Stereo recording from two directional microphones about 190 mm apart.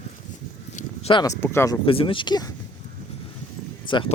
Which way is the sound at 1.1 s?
20° left (ahead or behind).